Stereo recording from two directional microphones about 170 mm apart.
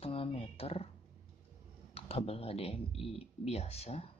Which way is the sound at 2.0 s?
35° left (ahead or behind).